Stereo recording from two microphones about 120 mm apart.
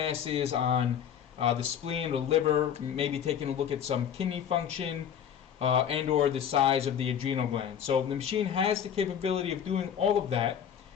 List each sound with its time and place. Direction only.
0.0 s speech: 50° right (ahead or behind)